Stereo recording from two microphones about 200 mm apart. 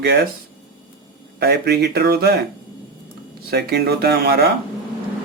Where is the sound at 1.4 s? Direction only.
55° right (ahead or behind).